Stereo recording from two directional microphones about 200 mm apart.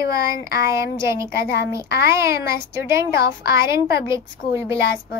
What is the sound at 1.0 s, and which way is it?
A child's voice, 15° right (ahead or behind).